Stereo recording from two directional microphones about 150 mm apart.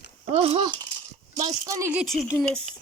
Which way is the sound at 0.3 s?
40° right (ahead or behind).